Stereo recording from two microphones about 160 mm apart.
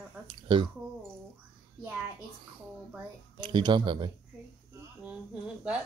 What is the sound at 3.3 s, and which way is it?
Speech, 30° right (ahead or behind).